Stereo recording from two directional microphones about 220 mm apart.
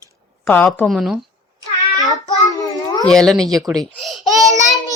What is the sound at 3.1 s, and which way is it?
A woman's voice, centre (ahead or behind).